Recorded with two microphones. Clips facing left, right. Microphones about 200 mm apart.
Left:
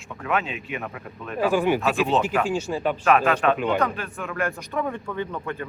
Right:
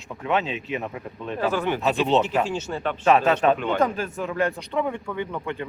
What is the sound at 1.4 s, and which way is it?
Speech, 10° left (ahead or behind).